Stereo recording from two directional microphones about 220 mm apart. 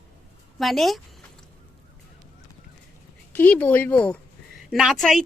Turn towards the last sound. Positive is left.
turn(degrees=0)  # may be behind; listen again after turning